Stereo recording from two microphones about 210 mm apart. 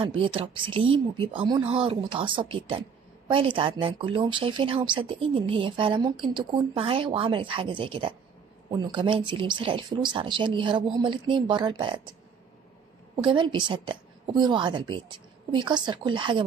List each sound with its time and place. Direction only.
0.0 s speech: 25° right (ahead or behind)
13.2 s speech: 20° right (ahead or behind)